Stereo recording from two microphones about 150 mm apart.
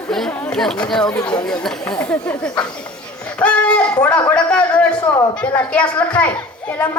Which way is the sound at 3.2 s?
10° left (ahead or behind).